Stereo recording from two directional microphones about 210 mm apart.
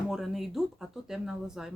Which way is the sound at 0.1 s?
Centre (ahead or behind).